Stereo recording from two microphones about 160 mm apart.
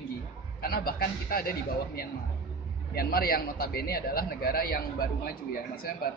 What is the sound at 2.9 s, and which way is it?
A man's voice, 70° left (ahead or behind).